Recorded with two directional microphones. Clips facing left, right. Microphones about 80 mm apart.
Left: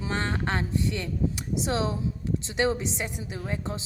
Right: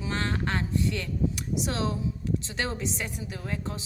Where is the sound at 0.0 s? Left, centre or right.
Left.